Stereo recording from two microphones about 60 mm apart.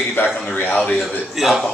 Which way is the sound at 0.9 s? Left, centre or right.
Centre.